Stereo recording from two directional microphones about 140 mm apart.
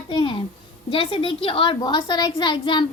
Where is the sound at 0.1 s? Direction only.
40° left (ahead or behind).